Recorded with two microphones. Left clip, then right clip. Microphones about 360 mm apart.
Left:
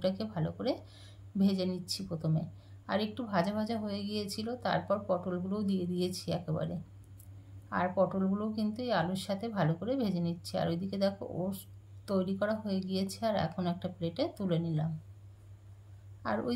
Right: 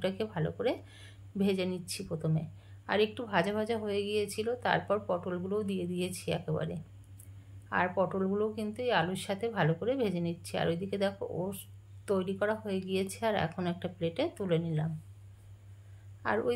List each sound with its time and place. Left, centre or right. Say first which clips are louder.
0.0 s speech: right 1 dB; centre
1.9 s speech: left 1 dB; centre
2.9 s speech: right 4 dB; centre